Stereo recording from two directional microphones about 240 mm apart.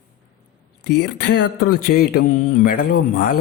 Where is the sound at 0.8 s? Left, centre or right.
Left.